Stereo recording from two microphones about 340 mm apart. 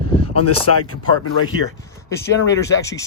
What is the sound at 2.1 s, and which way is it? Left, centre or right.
Speech, centre.